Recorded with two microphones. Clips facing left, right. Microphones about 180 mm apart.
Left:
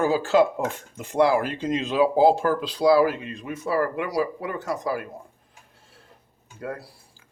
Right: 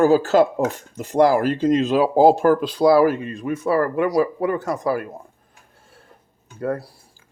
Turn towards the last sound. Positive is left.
turn(degrees=-45)  # may be behind; listen again after turning